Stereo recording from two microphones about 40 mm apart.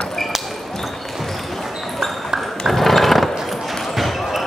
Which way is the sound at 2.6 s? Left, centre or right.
Centre.